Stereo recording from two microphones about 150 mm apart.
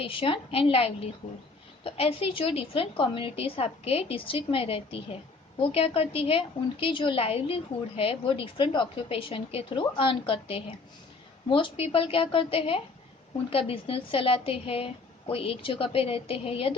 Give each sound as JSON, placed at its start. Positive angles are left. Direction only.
{"t": 0.0, "sound": "a woman's voice", "side_deg": 35}